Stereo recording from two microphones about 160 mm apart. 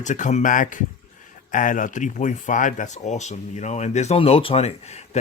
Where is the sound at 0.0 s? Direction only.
50° left (ahead or behind).